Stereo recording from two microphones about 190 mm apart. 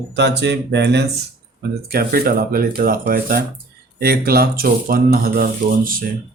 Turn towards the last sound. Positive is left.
turn(degrees=-50)  # may be behind; listen again after turning